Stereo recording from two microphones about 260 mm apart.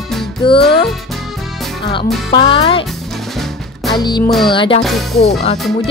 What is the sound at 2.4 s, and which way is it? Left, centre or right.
Speech, centre.